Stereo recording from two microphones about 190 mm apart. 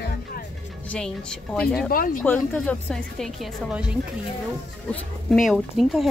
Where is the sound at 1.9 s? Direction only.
50° left (ahead or behind).